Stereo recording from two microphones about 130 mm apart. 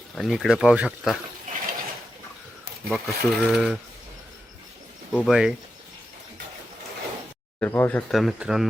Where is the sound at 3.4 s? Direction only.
5° right (ahead or behind).